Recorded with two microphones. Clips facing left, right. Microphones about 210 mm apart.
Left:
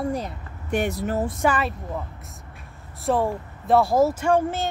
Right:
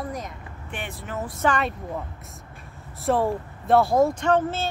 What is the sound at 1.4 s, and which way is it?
Speech, 5° left (ahead or behind).